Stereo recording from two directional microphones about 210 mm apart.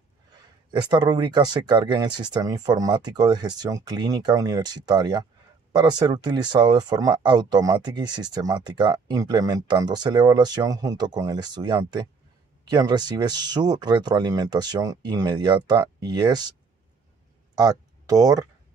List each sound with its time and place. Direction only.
0.7 s speech: 20° right (ahead or behind)
17.6 s speech: 15° right (ahead or behind)